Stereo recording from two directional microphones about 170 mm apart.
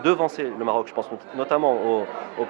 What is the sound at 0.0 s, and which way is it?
Speech, 15° right (ahead or behind).